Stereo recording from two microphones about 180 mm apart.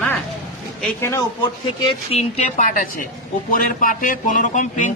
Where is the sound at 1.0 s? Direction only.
15° left (ahead or behind).